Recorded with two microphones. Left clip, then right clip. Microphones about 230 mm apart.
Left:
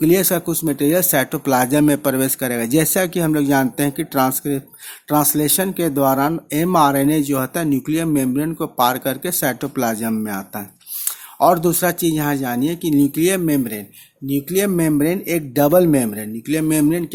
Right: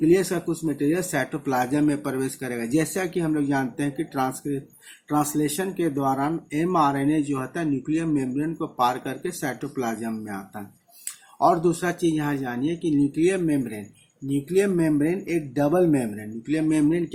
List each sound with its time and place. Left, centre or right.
0.0 s speech: left